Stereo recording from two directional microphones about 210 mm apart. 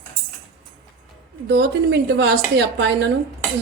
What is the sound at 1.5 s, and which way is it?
A woman's voice, 55° right (ahead or behind).